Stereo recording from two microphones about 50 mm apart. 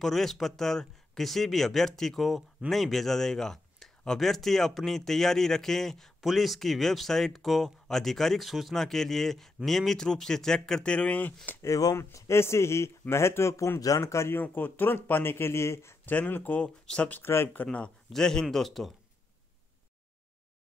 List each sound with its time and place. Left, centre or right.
0.0 s speech: centre; by 11.1 s left
11.6 s speech: left
14.3 s speech: left
16.1 s speech: left
16.8 s speech: left
18.1 s speech: centre